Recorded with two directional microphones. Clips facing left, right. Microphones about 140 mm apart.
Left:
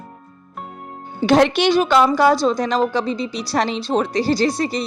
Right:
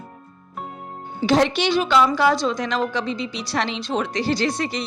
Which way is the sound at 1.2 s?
55° left (ahead or behind).